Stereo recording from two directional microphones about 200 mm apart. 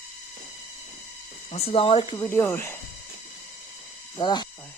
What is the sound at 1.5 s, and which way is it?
Speech, 30° left (ahead or behind).